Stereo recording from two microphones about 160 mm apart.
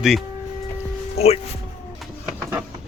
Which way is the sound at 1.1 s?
40° left (ahead or behind).